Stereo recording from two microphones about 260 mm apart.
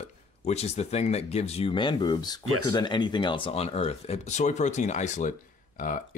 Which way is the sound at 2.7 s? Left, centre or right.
Centre.